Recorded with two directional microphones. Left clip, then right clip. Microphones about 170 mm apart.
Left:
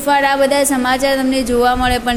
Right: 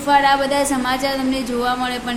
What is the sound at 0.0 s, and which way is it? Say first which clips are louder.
A woman's voice: left 2 dB; 40° left (ahead or behind).